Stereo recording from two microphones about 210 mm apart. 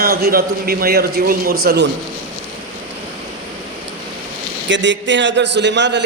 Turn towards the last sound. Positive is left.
turn(degrees=-55)  # may be behind; listen again after turning